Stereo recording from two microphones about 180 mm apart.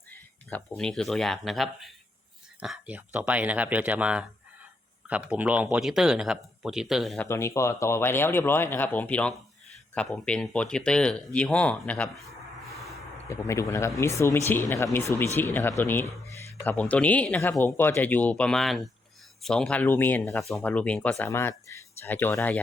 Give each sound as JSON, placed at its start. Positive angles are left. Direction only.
{"t": 0.1, "sound": "speech", "side_deg": 10}
{"t": 7.3, "sound": "speech", "side_deg": 15}
{"t": 13.2, "sound": "speech", "side_deg": 15}